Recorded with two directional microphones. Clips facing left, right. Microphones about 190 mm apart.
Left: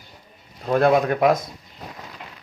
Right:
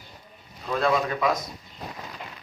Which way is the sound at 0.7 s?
55° left (ahead or behind).